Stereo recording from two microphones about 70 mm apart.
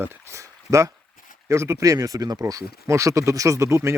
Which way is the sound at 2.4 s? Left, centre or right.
Right.